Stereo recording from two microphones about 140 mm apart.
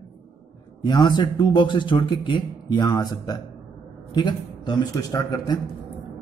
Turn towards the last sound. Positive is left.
turn(degrees=25)  # may be behind; listen again after turning